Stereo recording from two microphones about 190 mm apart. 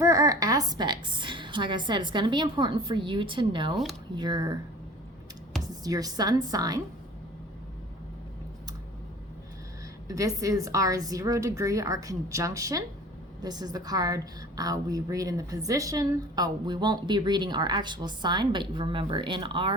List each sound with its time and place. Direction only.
0.0 s a woman's voice: 15° right (ahead or behind)
5.8 s a woman's voice: 20° right (ahead or behind)
10.1 s a woman's voice: 15° right (ahead or behind)